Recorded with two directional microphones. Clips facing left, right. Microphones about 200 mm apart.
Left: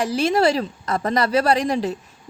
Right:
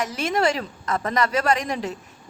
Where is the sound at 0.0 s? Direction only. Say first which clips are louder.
Left 4 dB; 35° left (ahead or behind).